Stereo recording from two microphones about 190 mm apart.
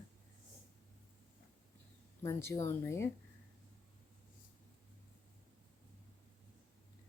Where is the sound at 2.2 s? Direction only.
15° left (ahead or behind).